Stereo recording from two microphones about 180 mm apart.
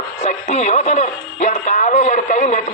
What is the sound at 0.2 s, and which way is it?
Speech, 40° left (ahead or behind).